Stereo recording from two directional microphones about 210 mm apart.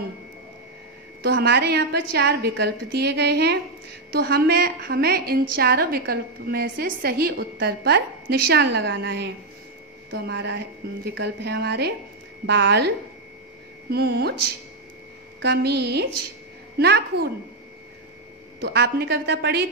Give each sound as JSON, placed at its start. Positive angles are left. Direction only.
{"t": 1.2, "sound": "a woman's voice", "side_deg": -55}
{"t": 15.4, "sound": "a woman's voice", "side_deg": -50}
{"t": 18.6, "sound": "a woman's voice", "side_deg": -50}